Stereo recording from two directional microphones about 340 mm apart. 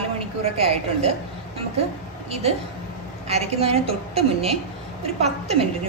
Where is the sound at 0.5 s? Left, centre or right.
Centre.